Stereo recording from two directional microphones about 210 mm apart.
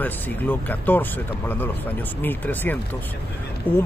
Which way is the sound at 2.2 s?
10° left (ahead or behind).